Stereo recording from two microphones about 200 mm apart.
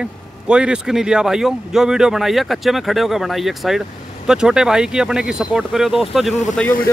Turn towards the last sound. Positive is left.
turn(degrees=0)  # may be behind; listen again after turning